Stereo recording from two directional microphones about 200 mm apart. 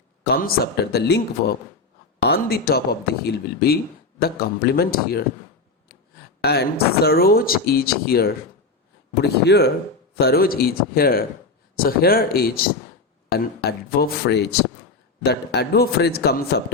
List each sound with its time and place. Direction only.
0.3 s speech: 50° left (ahead or behind)
6.4 s speech: 55° left (ahead or behind)